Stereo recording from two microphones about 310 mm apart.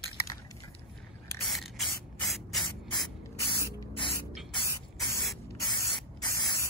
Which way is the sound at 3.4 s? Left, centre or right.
Centre.